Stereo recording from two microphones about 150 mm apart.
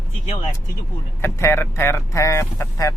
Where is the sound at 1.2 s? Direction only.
15° left (ahead or behind).